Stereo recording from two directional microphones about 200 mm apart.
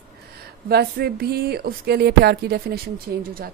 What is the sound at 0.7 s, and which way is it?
Speech, 50° right (ahead or behind).